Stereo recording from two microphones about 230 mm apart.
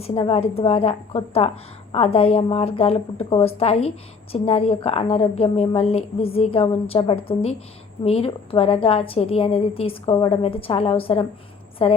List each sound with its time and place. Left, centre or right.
0.0 s a woman's voice: left